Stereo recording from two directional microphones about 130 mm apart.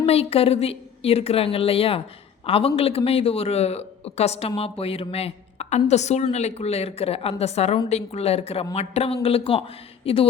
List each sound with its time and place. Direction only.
0.0 s a man's voice: 50° left (ahead or behind)